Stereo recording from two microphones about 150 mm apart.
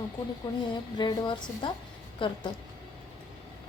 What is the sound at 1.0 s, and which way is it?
A woman's voice, 30° left (ahead or behind).